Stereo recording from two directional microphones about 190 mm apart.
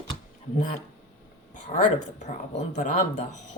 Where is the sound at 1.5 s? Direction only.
40° left (ahead or behind).